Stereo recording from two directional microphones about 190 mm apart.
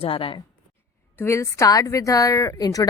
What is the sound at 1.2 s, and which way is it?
A woman's voice, 15° left (ahead or behind).